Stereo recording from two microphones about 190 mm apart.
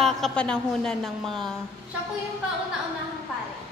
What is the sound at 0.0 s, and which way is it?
A woman's voice, 5° left (ahead or behind).